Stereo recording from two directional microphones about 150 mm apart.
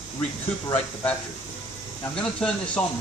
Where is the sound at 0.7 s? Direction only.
10° left (ahead or behind).